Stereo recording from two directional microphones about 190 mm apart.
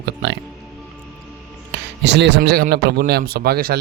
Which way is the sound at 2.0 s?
65° right (ahead or behind).